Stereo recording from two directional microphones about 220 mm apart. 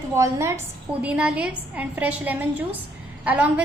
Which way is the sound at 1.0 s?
5° right (ahead or behind).